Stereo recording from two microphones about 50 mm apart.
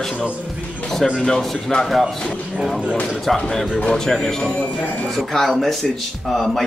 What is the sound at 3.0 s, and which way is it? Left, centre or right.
A man's voice, centre.